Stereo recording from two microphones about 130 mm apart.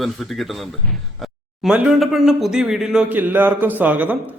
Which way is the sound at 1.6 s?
5° right (ahead or behind).